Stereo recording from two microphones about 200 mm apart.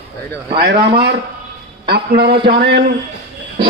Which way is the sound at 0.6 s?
55° right (ahead or behind).